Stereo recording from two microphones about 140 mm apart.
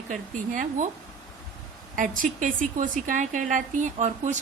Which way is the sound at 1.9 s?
75° right (ahead or behind).